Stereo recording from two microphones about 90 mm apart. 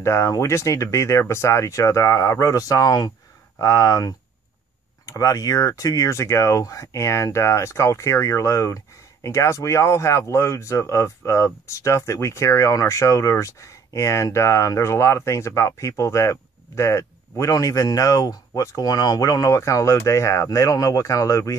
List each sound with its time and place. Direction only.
0.0 s speech: 35° left (ahead or behind)